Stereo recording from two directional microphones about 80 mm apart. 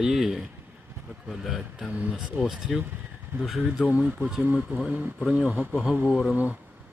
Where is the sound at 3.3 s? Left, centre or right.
Right.